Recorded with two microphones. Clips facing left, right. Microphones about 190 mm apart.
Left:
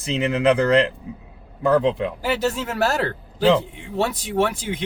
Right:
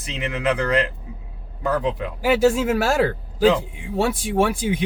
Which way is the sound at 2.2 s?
10° right (ahead or behind).